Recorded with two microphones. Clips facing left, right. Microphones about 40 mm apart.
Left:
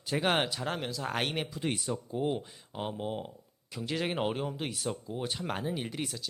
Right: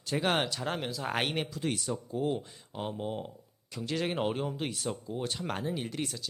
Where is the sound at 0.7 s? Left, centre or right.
Centre.